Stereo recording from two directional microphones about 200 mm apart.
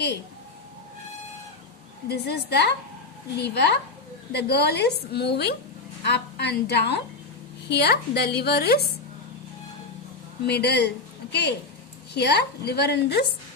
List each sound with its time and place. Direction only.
2.0 s a woman's voice: 55° left (ahead or behind)
10.4 s a woman's voice: 55° left (ahead or behind)